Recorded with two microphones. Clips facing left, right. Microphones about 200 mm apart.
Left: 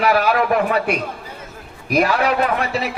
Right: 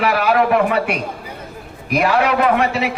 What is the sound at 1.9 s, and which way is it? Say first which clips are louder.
Speech: right 1 dB; 40° left (ahead or behind).